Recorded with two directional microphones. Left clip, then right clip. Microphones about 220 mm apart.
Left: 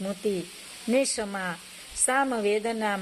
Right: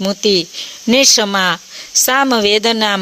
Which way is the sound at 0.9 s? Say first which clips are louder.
Right 15 dB; 50° right (ahead or behind).